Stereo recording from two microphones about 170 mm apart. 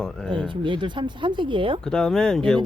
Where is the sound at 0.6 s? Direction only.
30° right (ahead or behind).